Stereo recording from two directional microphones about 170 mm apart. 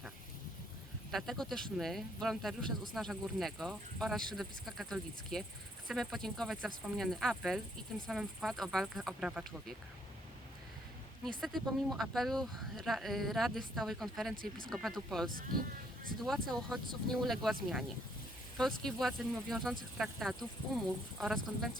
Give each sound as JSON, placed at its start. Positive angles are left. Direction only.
{"t": 1.1, "sound": "speech", "side_deg": 0}
{"t": 11.3, "sound": "speech", "side_deg": 0}
{"t": 15.3, "sound": "speech", "side_deg": -55}
{"t": 16.2, "sound": "speech", "side_deg": 0}